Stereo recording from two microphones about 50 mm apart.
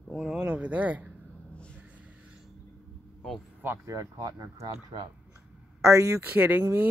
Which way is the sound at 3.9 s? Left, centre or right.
Right.